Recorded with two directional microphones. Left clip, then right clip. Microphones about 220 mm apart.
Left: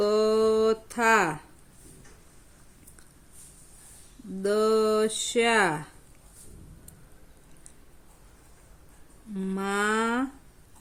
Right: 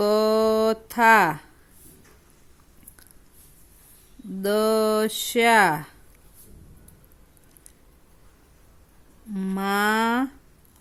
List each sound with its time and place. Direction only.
0.0 s a sound: 30° right (ahead or behind)
4.4 s speech: 30° right (ahead or behind)
9.3 s speech: 30° right (ahead or behind)